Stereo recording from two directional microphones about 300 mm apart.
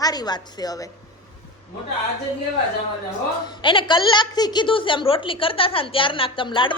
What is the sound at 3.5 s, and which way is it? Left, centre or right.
A woman's voice, centre.